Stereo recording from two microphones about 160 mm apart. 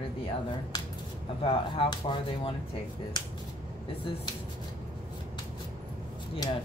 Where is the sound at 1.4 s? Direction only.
35° left (ahead or behind).